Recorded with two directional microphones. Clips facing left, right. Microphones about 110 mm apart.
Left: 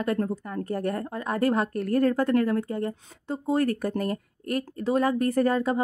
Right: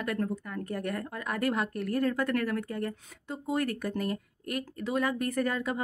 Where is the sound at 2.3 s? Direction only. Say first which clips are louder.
Left 7 dB; 25° left (ahead or behind).